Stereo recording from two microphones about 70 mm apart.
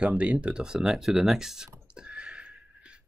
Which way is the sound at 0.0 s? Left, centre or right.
Centre.